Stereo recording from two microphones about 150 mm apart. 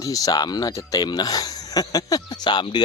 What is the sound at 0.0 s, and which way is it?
Speech, 25° left (ahead or behind).